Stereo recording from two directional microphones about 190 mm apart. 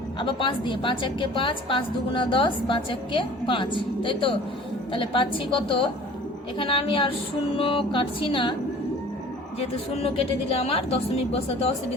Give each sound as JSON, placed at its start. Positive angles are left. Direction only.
{"t": 0.2, "sound": "a woman's voice", "side_deg": 25}
{"t": 9.6, "sound": "a woman's voice", "side_deg": 30}